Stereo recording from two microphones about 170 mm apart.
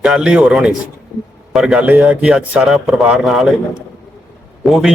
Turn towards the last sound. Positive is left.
turn(degrees=0)  # may be behind; listen again after turning